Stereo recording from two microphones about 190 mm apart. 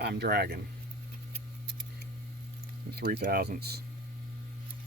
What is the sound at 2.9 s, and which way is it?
Speech, 55° right (ahead or behind).